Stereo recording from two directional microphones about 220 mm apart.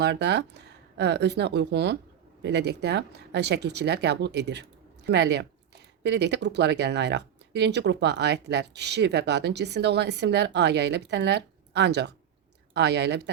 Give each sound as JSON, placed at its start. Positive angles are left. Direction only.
{"t": 0.0, "sound": "speech", "side_deg": -50}